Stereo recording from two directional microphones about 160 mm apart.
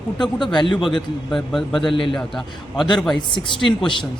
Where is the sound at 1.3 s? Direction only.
Centre (ahead or behind).